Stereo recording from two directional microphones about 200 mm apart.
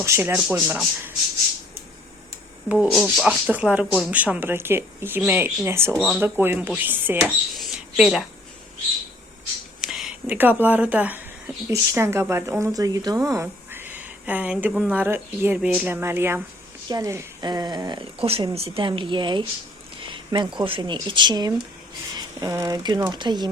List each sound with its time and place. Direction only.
0.0 s speech: 10° right (ahead or behind)
2.6 s speech: 5° right (ahead or behind)
6.0 s speech: centre (ahead or behind)
6.2 s speech: 10° right (ahead or behind)
7.5 s a sound: centre (ahead or behind)
9.8 s a woman's voice: centre (ahead or behind); by 23.5 s 20° right (ahead or behind)